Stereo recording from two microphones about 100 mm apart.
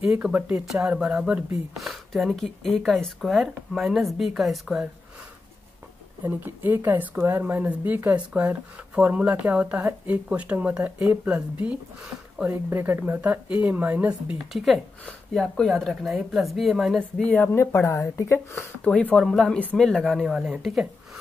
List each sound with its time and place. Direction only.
0.0 s speech: 10° right (ahead or behind)
6.2 s speech: 20° right (ahead or behind)
12.6 s speech: 25° right (ahead or behind)
14.5 s speech: centre (ahead or behind)
17.2 s speech: 20° left (ahead or behind)
18.9 s speech: 5° left (ahead or behind)